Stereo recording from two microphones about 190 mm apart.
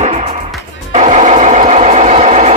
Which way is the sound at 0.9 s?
40° right (ahead or behind).